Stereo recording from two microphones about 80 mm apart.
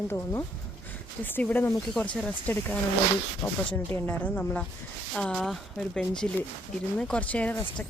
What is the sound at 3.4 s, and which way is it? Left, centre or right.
Speech, left.